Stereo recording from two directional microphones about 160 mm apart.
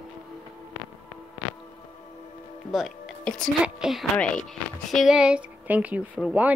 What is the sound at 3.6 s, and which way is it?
Speech, 5° right (ahead or behind).